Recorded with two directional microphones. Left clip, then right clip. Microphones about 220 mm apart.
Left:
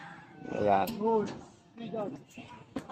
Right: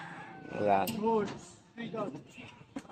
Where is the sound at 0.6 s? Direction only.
5° left (ahead or behind).